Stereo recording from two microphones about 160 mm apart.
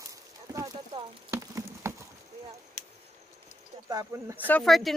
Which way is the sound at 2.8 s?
45° left (ahead or behind).